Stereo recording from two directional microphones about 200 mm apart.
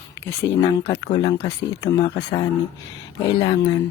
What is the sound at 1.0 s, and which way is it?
Speech, 20° left (ahead or behind).